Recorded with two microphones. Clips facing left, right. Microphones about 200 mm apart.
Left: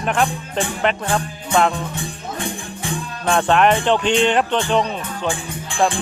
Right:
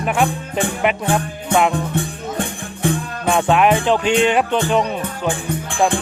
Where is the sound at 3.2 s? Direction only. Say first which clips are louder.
Right 1 dB; 5° right (ahead or behind).